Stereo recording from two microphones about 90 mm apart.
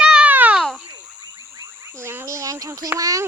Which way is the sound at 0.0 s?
10° right (ahead or behind).